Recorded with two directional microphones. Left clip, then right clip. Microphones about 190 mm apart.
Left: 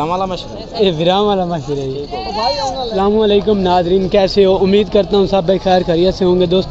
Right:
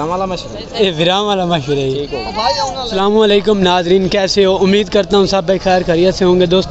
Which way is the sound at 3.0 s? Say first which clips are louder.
Right 2 dB; 25° right (ahead or behind).